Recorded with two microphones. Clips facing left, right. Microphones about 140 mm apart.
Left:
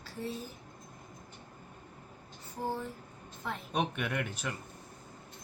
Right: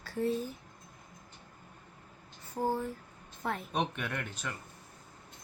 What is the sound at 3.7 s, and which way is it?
Speech, 5° left (ahead or behind).